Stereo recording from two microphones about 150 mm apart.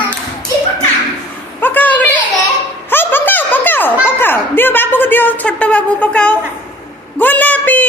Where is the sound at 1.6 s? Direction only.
10° left (ahead or behind).